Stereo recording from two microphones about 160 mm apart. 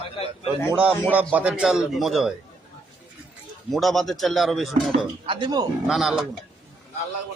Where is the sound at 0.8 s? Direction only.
5° right (ahead or behind).